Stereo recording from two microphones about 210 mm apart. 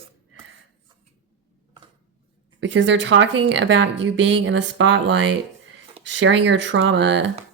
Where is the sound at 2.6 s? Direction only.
60° right (ahead or behind).